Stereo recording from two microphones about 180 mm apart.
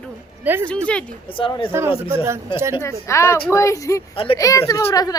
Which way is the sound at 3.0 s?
15° left (ahead or behind).